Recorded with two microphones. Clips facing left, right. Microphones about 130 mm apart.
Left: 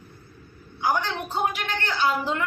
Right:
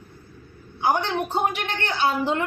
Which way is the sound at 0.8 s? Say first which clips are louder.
Right 3 dB; 25° right (ahead or behind).